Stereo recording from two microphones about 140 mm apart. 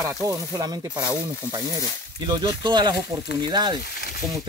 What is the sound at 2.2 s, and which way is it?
Speech, 30° right (ahead or behind).